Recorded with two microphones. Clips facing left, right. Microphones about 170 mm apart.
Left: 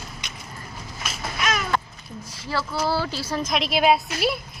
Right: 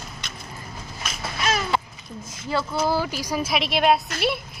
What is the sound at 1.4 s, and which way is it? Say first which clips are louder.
Babbling: right 1 dB; 30° right (ahead or behind).